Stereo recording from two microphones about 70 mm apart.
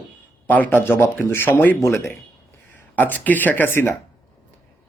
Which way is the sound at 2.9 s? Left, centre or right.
Left.